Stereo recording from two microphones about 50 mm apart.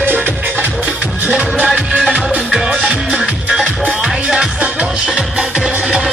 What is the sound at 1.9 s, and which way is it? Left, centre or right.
Music, centre.